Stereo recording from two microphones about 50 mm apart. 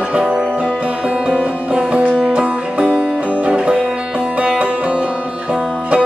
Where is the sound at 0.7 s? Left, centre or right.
Right.